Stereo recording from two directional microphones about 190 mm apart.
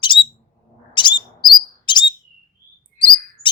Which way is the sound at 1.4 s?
Centre (ahead or behind).